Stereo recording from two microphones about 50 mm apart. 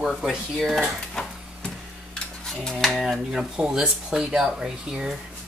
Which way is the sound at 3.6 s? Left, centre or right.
Centre.